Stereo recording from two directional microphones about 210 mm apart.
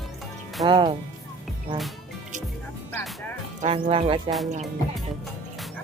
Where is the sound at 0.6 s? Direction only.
20° right (ahead or behind).